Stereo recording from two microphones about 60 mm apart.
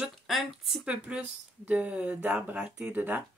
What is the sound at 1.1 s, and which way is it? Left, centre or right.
Speech, centre.